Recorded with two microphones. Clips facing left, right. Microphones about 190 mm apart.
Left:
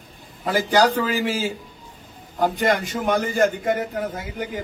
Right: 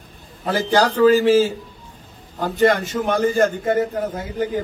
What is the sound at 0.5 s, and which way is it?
Speech, 15° left (ahead or behind).